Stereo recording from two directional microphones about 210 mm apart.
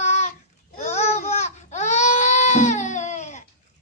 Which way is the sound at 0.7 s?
30° left (ahead or behind).